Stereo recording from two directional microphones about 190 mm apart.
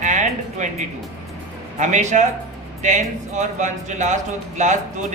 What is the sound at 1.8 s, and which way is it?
Speech, 40° right (ahead or behind).